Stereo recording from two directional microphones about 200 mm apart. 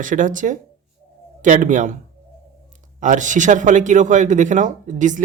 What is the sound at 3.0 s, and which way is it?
Speech, 40° right (ahead or behind).